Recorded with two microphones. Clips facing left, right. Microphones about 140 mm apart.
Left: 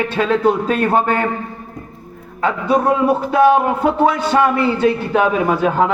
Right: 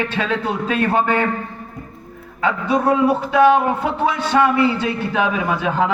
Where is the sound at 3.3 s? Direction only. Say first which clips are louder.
Left 1 dB; 45° left (ahead or behind).